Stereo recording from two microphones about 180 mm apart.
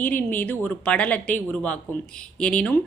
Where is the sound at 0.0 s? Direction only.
10° left (ahead or behind).